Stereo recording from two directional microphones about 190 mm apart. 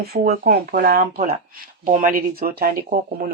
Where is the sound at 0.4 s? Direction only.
50° right (ahead or behind).